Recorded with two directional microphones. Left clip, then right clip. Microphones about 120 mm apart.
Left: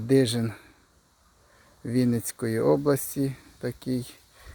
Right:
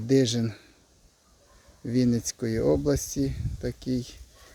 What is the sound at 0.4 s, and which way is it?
Speech, 30° right (ahead or behind).